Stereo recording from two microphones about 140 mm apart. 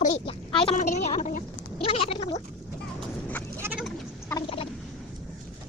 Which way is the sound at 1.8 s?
45° left (ahead or behind).